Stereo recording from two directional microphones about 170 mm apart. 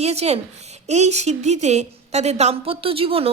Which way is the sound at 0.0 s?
40° right (ahead or behind).